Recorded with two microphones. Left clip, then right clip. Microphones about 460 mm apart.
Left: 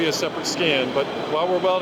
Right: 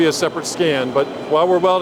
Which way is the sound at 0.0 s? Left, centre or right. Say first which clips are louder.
Right 6 dB; right.